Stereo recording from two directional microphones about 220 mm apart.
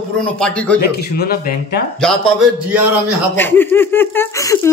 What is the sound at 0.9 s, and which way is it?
Speech, 45° left (ahead or behind).